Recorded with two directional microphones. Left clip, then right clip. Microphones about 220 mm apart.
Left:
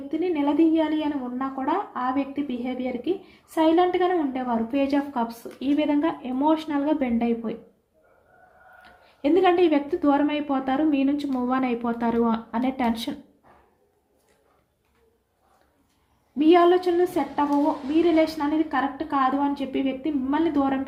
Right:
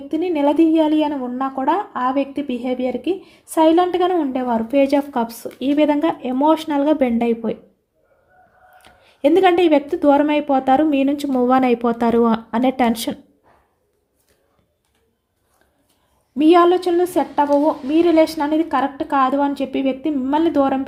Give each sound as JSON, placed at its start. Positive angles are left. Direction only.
{"t": 0.1, "sound": "a woman's voice", "side_deg": -50}
{"t": 8.8, "sound": "a woman's voice", "side_deg": -55}
{"t": 16.4, "sound": "a woman's voice", "side_deg": -50}